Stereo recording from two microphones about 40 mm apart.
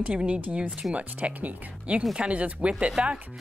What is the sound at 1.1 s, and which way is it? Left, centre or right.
Speech, right.